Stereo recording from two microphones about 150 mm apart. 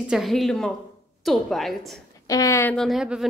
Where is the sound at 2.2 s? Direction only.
20° left (ahead or behind).